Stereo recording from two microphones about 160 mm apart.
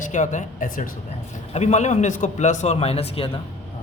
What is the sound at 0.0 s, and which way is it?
Speech, 50° left (ahead or behind).